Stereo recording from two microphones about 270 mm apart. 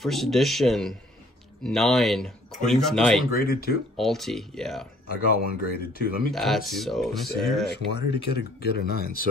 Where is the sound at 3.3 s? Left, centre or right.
Left.